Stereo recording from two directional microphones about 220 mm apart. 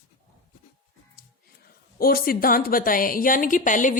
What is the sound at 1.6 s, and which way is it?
A woman's voice, 45° left (ahead or behind).